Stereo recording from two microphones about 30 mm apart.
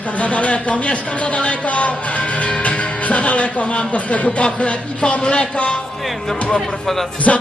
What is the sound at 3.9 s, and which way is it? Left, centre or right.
Speech, left.